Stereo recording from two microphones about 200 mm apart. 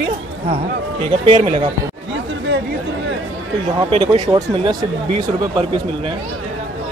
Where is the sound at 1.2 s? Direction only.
30° right (ahead or behind).